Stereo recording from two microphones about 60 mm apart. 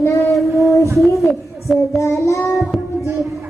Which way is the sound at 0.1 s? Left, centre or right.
Left.